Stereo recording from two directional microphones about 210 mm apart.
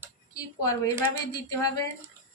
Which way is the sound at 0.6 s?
15° left (ahead or behind).